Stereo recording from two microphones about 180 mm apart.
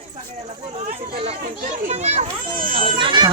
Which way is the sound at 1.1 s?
35° right (ahead or behind).